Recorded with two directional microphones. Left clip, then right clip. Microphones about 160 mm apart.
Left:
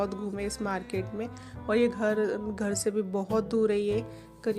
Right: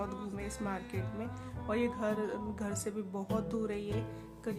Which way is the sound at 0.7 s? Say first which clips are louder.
Left 8 dB; 35° left (ahead or behind).